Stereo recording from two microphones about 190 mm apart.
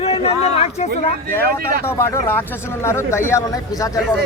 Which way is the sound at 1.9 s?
10° left (ahead or behind).